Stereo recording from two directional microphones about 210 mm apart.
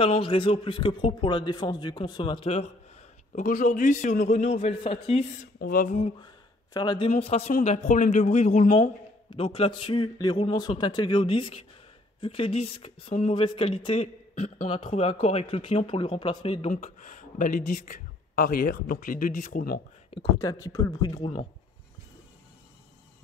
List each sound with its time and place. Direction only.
0.0 s a man's voice: 25° left (ahead or behind)
3.3 s speech: 40° left (ahead or behind)
5.6 s a man's voice: 40° left (ahead or behind)
20.1 s a man's voice: 20° left (ahead or behind)